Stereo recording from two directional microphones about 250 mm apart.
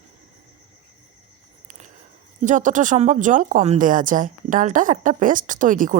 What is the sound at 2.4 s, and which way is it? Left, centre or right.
Speech, right.